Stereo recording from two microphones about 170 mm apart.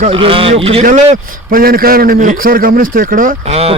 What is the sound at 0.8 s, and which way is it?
A man's voice, 50° right (ahead or behind).